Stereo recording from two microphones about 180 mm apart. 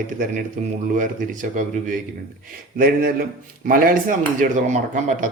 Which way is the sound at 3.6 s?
50° right (ahead or behind).